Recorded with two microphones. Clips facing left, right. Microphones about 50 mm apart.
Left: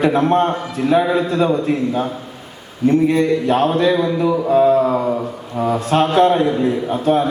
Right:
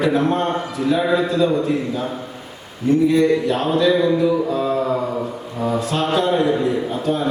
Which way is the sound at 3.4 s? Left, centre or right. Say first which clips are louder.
Left 2 dB; left.